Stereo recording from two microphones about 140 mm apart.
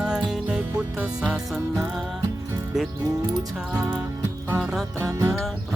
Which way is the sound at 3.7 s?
5° right (ahead or behind).